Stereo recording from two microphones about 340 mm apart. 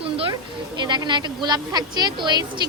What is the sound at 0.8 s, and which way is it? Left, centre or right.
A woman's voice, centre.